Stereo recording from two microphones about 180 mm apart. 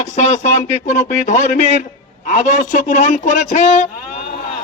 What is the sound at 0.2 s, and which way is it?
A man's voice, 40° left (ahead or behind).